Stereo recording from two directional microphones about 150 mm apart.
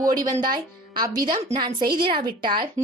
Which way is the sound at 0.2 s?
30° right (ahead or behind).